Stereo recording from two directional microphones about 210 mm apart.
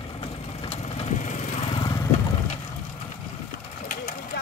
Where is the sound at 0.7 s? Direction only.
35° left (ahead or behind).